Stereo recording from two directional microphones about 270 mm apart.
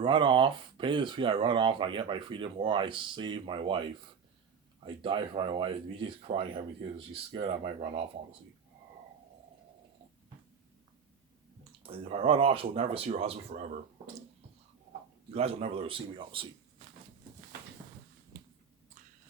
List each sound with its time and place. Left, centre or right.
0.0 s speech: centre
5.0 s speech: centre
11.8 s speech: right
15.3 s speech: right